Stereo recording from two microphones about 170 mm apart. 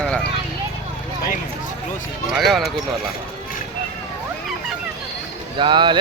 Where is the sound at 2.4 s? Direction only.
Centre (ahead or behind).